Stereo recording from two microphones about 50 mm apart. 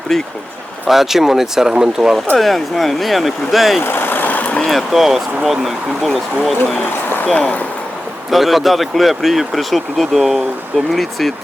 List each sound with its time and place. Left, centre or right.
0.1 s speech: centre
0.9 s speech: centre
2.3 s speech: centre
3.8 s vehicle: left
4.6 s speech: centre
8.3 s speech: centre